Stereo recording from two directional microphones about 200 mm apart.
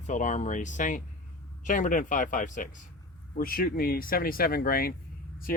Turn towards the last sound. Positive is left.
turn(degrees=45)  # may be behind; listen again after turning